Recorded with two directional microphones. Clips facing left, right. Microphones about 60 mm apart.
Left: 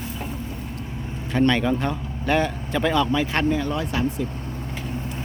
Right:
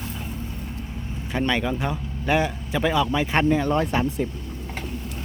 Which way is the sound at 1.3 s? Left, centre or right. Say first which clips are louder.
Left 4 dB; centre.